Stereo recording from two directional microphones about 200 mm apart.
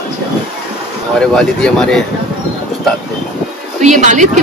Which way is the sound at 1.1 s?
5° left (ahead or behind).